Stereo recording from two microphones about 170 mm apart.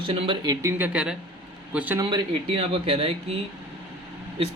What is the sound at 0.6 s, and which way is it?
Speech, 15° right (ahead or behind).